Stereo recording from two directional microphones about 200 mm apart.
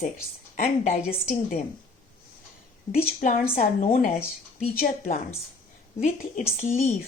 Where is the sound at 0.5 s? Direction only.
35° left (ahead or behind).